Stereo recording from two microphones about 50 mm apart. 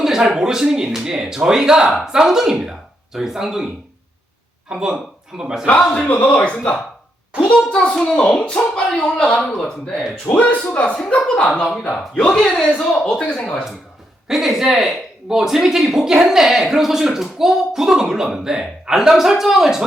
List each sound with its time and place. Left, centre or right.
0.0 s speech: centre
4.7 s speech: centre
6.1 s a man's voice: left; by 9.0 s centre
9.4 s speech: centre
9.6 s a child's voice: centre
10.2 s a man's voice: left
11.6 s a child's voice: centre
14.3 s speech: centre